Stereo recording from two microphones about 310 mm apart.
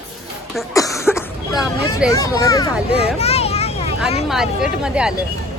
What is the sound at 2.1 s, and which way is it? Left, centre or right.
Speech, centre.